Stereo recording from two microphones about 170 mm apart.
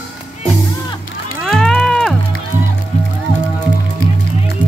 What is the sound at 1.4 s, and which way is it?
Cattle, centre (ahead or behind).